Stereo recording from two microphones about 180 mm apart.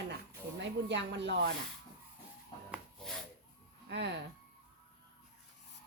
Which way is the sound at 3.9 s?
75° right (ahead or behind).